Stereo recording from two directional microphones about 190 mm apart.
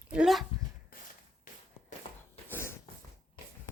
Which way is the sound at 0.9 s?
50° left (ahead or behind).